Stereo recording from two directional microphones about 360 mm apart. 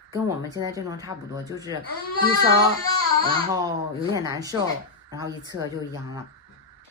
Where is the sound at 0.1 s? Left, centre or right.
Centre.